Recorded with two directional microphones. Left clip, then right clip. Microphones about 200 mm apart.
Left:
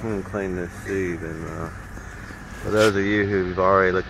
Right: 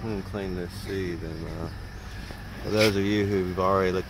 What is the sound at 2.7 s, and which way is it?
Speech, 10° right (ahead or behind).